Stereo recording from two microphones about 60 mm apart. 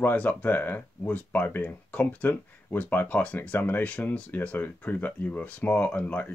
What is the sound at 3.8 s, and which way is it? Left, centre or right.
Speech, left.